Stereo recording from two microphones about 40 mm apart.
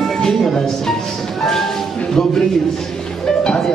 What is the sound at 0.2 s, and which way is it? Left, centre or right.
Music, left.